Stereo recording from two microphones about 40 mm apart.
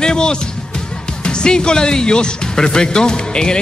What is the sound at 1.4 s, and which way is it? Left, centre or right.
A man's voice, left.